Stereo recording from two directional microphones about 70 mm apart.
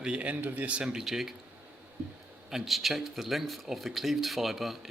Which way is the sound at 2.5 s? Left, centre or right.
Centre.